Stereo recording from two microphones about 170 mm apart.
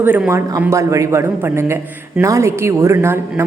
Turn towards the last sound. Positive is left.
turn(degrees=-15)  # may be behind; listen again after turning